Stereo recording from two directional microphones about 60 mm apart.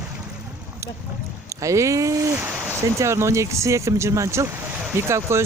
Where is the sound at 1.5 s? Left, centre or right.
Right.